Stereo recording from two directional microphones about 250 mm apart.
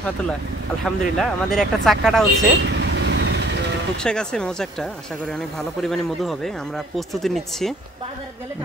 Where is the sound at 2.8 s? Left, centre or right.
Right.